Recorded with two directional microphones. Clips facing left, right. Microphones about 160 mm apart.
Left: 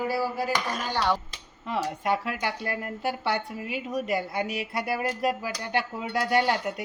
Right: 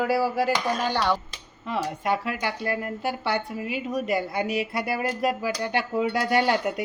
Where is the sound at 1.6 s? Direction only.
90° right.